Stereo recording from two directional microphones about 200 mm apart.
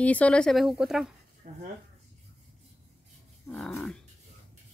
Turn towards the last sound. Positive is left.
turn(degrees=5)  # may be behind; listen again after turning